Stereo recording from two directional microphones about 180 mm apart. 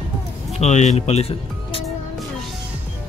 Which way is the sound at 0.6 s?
40° left (ahead or behind).